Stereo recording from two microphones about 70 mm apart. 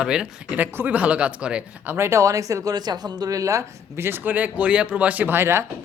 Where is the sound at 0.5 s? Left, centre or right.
Right.